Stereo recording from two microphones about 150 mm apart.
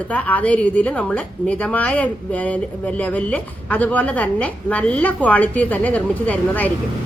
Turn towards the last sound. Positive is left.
turn(degrees=10)  # may be behind; listen again after turning